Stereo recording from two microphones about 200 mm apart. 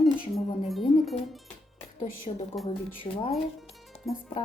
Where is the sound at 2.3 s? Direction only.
30° left (ahead or behind).